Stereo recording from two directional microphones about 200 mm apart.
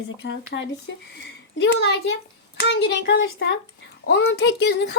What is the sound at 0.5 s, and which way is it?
Child singing, 65° left (ahead or behind).